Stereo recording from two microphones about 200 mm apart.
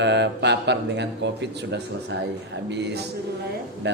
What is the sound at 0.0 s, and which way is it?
A man's voice, 60° right (ahead or behind).